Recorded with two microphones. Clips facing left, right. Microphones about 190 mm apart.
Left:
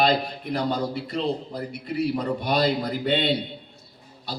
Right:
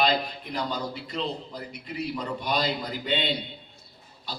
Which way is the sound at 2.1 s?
55° left (ahead or behind).